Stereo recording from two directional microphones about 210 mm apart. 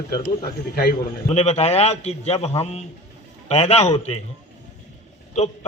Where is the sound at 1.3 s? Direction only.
30° left (ahead or behind).